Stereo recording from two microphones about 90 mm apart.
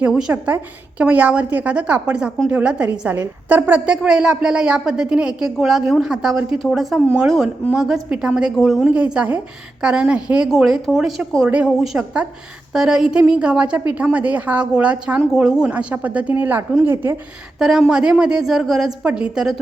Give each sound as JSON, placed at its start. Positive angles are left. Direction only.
{"t": 0.1, "sound": "a woman's voice", "side_deg": -10}
{"t": 3.9, "sound": "a woman's voice", "side_deg": -10}
{"t": 8.9, "sound": "a woman's voice", "side_deg": -15}
{"t": 17.6, "sound": "a woman's voice", "side_deg": -5}